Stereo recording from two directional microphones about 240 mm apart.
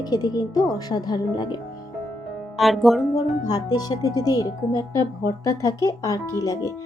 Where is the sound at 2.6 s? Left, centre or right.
Centre.